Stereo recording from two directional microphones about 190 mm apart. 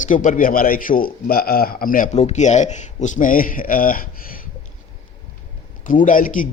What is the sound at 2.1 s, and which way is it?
A man's voice, 35° left (ahead or behind).